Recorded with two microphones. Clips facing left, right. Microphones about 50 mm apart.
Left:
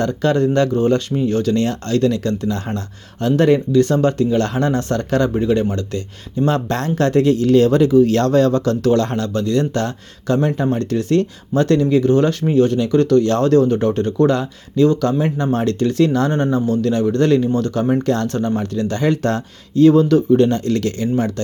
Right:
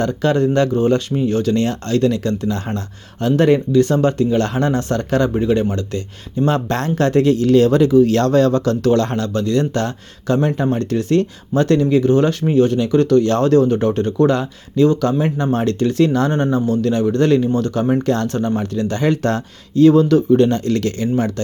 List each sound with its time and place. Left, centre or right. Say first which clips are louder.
0.0 s speech: even; right
7.3 s speech: even; right
8.3 s speech: even; right
18.1 s speech: even; right
19.1 s speech: even; right
19.7 s speech: even; right